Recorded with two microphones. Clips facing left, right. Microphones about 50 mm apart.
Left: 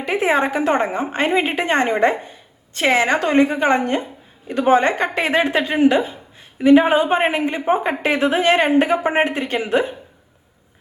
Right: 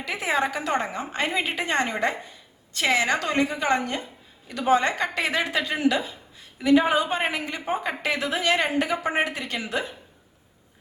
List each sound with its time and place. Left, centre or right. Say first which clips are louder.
0.0 s a woman's voice: left 7 dB; left